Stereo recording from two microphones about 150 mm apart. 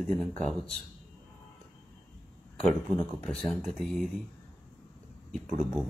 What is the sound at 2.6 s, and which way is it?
Speech, 5° left (ahead or behind).